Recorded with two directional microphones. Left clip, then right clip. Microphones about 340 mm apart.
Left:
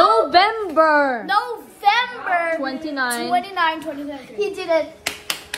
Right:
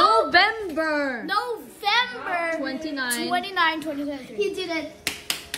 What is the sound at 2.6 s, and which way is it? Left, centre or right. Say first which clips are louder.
Speech: left 5 dB; centre.